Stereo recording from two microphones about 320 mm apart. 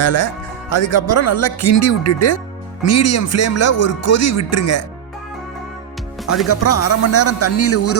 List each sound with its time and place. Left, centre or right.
0.0 s speech: left
6.2 s speech: left